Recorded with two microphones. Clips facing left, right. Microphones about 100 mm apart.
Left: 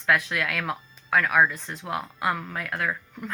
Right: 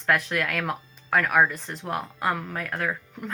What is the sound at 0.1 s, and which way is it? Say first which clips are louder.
A woman's voice: even; 40° right (ahead or behind).